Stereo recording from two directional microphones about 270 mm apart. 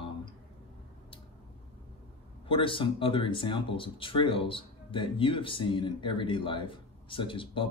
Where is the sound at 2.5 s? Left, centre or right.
Centre.